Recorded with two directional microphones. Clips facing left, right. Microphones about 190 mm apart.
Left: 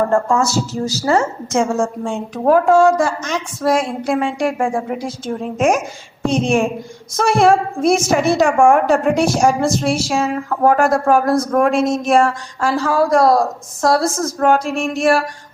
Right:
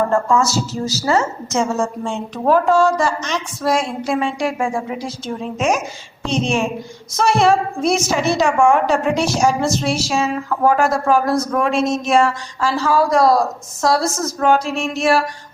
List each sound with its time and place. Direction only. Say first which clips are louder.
0.1 s a woman's voice: left 1 dB; 50° left (ahead or behind)